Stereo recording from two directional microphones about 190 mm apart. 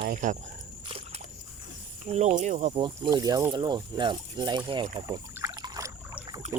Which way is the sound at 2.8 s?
20° right (ahead or behind).